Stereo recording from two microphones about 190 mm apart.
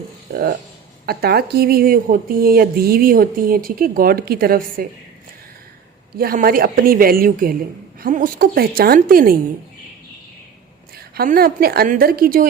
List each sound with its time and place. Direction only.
0.3 s a woman's voice: 55° right (ahead or behind)
6.1 s a woman's voice: 50° right (ahead or behind)
10.9 s a woman's voice: 55° right (ahead or behind)